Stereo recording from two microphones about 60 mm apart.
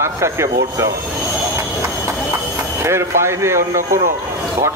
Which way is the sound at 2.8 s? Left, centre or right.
Right.